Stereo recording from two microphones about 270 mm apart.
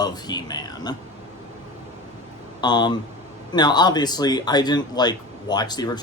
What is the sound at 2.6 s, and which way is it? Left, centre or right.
Speech, centre.